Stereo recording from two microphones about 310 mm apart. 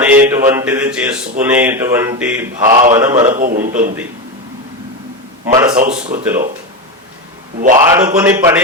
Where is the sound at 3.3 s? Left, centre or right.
Right.